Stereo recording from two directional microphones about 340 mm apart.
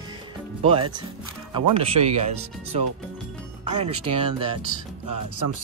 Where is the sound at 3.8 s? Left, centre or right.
Centre.